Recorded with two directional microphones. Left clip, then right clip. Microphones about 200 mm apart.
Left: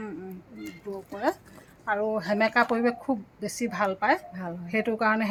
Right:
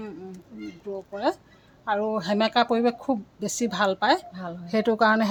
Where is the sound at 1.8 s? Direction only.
25° right (ahead or behind).